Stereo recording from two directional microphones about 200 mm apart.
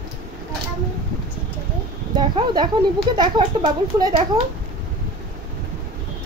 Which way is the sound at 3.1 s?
20° right (ahead or behind).